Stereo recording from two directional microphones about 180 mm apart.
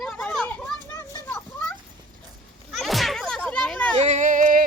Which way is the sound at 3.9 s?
40° right (ahead or behind).